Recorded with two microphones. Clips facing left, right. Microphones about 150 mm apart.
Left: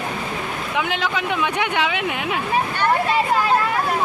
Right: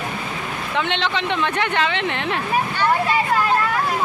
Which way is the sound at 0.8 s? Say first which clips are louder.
Right 1 dB; 5° left (ahead or behind).